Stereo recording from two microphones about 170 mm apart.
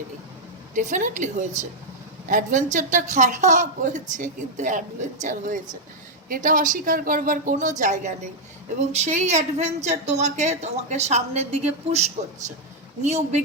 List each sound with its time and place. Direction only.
0.7 s a woman's voice: 45° right (ahead or behind)